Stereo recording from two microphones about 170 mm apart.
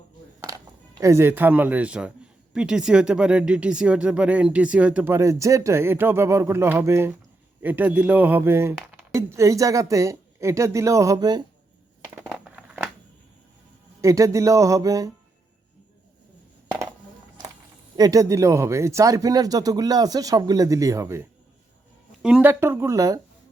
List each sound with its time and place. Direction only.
0.4 s speech: 20° right (ahead or behind)
12.3 s a sound: 5° right (ahead or behind)
14.0 s speech: 20° right (ahead or behind)
17.9 s speech: 20° right (ahead or behind)